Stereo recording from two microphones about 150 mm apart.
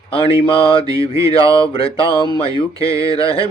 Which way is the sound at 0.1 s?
35° left (ahead or behind).